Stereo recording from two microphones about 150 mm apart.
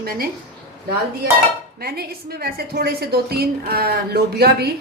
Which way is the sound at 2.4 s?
90° right.